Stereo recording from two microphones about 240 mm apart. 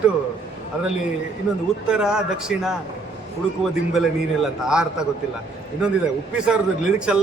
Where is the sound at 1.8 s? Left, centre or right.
Centre.